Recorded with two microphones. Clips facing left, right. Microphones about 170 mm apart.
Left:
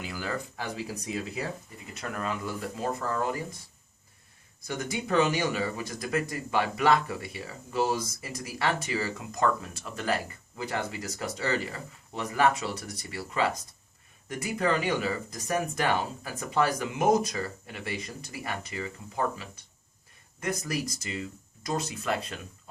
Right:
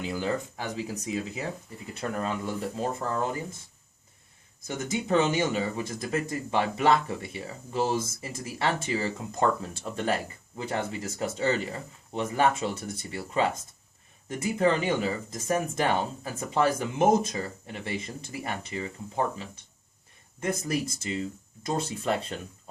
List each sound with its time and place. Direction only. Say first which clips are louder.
0.0 s speech: right 5 dB; 25° right (ahead or behind)
1.9 s speech: right 3 dB; 30° right (ahead or behind)
4.6 s speech: right 2 dB; 25° right (ahead or behind)